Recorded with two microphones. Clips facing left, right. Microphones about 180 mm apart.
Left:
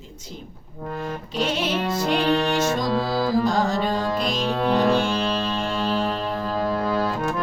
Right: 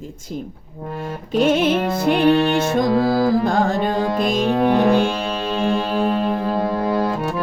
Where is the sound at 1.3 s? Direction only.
55° right (ahead or behind).